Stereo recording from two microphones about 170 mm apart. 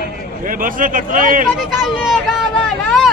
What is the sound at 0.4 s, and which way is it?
Speech, 55° right (ahead or behind).